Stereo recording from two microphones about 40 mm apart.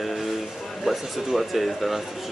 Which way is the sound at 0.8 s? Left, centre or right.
Centre.